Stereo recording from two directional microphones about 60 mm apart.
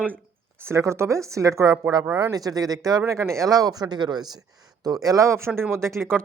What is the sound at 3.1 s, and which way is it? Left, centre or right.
Speech, right.